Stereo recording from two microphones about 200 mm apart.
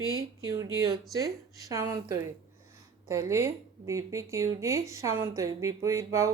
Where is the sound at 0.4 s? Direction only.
15° right (ahead or behind).